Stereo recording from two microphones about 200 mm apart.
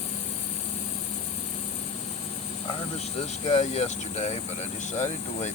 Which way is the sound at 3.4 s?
30° left (ahead or behind).